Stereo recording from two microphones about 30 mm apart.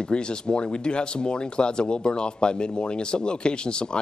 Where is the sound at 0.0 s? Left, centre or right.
Left.